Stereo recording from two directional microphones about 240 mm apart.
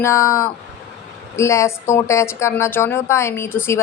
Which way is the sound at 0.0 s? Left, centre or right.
Centre.